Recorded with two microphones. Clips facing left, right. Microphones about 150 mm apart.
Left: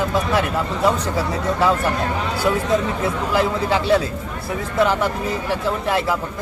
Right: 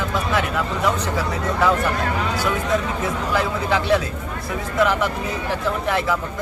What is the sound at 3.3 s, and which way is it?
Speech, 30° left (ahead or behind).